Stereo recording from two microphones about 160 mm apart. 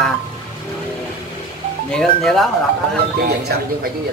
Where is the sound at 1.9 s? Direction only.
5° left (ahead or behind).